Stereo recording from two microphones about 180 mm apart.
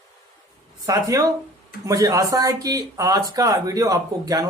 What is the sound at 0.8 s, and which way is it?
Speech, 20° right (ahead or behind).